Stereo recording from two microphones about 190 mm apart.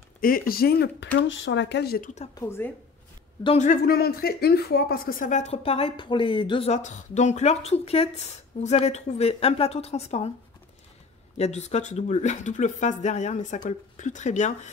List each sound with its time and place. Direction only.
0.2 s speech: 50° left (ahead or behind)
2.3 s a woman's voice: 10° left (ahead or behind)
3.4 s speech: 40° left (ahead or behind)
11.3 s speech: 35° left (ahead or behind)